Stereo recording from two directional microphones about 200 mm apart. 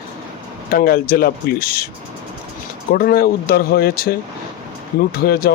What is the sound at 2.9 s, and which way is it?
Speech, 50° left (ahead or behind).